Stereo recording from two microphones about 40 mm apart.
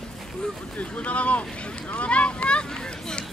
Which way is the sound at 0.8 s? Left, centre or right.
Left.